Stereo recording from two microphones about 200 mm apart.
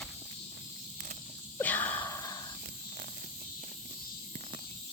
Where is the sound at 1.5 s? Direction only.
10° left (ahead or behind).